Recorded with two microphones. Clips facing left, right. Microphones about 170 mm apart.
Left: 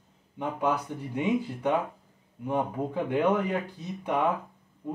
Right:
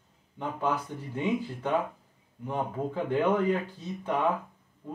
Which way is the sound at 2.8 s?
15° left (ahead or behind).